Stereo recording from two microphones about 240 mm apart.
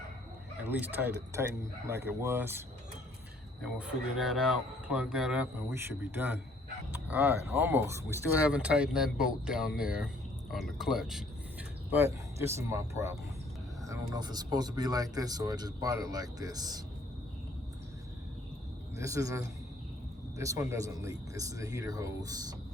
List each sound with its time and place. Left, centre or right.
0.7 s speech: centre
18.9 s speech: centre